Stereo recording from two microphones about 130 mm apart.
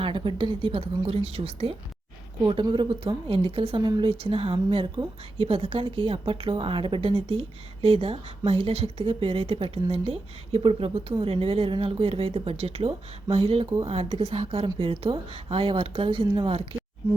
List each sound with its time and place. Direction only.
0.0 s a woman's voice: 40° right (ahead or behind)
2.4 s a woman's voice: 35° right (ahead or behind)
3.8 s a woman's voice: 35° right (ahead or behind)
4.1 s a woman's voice: 45° right (ahead or behind)
16.7 s a sound: 45° right (ahead or behind)